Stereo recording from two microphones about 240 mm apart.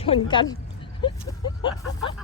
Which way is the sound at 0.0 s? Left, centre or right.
Left.